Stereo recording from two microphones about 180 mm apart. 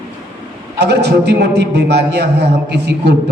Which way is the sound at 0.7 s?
65° right (ahead or behind).